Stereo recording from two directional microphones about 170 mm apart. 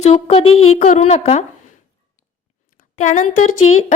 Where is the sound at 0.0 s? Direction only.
40° left (ahead or behind).